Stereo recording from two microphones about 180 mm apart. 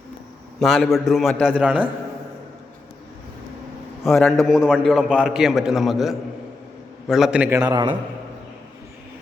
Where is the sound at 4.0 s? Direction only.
Centre (ahead or behind).